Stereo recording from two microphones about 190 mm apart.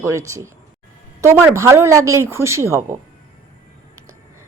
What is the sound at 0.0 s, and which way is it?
A woman's voice, 15° right (ahead or behind).